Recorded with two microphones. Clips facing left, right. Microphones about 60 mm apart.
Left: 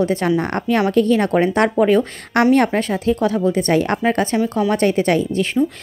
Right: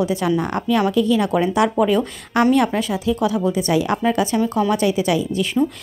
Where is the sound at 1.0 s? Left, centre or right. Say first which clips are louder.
Left 2 dB; left.